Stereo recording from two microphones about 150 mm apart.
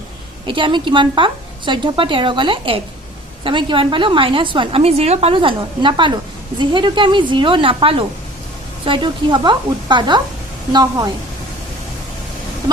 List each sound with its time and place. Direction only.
0.4 s a woman's voice: 35° right (ahead or behind)